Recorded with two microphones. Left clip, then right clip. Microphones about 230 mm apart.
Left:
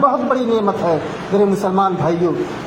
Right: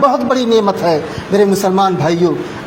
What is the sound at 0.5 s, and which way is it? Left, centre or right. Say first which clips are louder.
A man's voice: right 4 dB; right.